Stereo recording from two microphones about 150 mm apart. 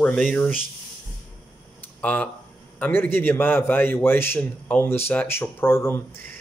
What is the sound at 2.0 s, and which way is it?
Speech, 10° left (ahead or behind).